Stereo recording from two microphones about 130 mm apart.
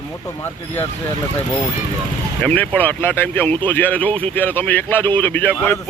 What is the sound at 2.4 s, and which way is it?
Speech, 10° left (ahead or behind).